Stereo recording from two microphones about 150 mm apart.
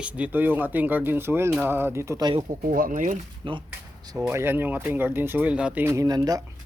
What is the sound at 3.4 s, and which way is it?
Speech, 35° right (ahead or behind).